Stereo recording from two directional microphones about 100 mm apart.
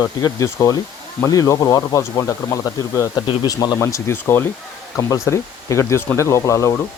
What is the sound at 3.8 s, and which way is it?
Speech, 25° left (ahead or behind).